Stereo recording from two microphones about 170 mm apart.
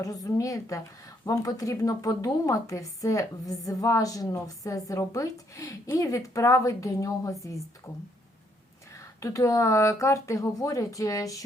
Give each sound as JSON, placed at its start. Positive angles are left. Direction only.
{"t": 0.0, "sound": "speech", "side_deg": 20}
{"t": 9.0, "sound": "speech", "side_deg": 20}